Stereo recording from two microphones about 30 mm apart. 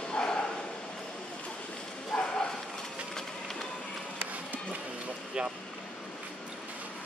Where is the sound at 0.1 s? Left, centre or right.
Left.